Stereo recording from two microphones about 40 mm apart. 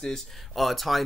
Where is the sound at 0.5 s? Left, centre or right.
Centre.